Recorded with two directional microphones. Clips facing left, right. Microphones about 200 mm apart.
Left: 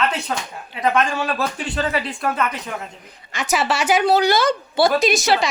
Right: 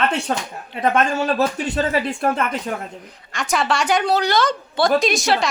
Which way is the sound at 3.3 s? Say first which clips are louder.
Even; 5° left (ahead or behind).